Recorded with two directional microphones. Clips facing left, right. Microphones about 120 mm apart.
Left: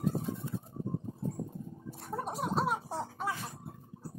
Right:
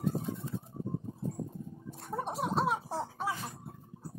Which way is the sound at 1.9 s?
Centre (ahead or behind).